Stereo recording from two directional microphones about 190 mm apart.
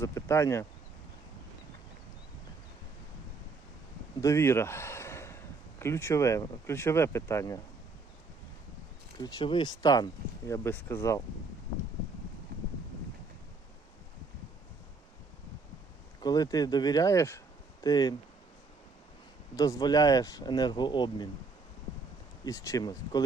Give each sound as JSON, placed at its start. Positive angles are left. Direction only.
{"t": 0.0, "sound": "speech", "side_deg": 15}
{"t": 4.2, "sound": "speech", "side_deg": 15}
{"t": 9.1, "sound": "speech", "side_deg": 25}
{"t": 16.2, "sound": "speech", "side_deg": 20}
{"t": 19.5, "sound": "speech", "side_deg": 20}
{"t": 22.4, "sound": "speech", "side_deg": 20}